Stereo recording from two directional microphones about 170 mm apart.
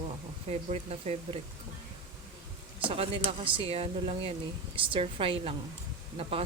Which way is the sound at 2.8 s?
35° right (ahead or behind).